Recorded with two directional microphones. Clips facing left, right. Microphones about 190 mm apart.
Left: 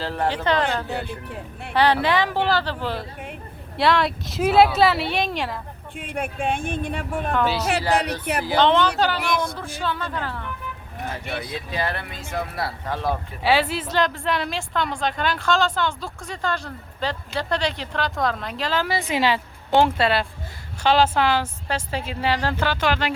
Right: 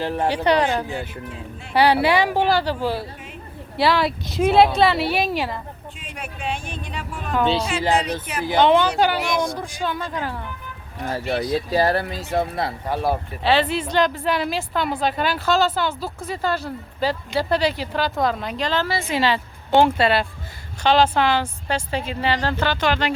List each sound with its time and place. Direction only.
0.0 s a woman's voice: 15° right (ahead or behind)
6.0 s speech: 55° left (ahead or behind)
7.7 s speech: 65° left (ahead or behind)
8.4 s speech: 10° right (ahead or behind)
11.0 s speech: 35° right (ahead or behind)
12.8 s speech: 10° right (ahead or behind)
13.4 s a woman's voice: 10° left (ahead or behind)
19.7 s a woman's voice: centre (ahead or behind)